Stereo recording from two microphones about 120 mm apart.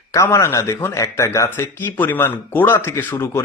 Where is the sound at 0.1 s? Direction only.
25° left (ahead or behind).